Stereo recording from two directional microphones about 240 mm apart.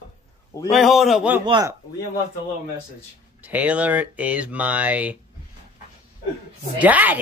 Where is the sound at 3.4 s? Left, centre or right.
Centre.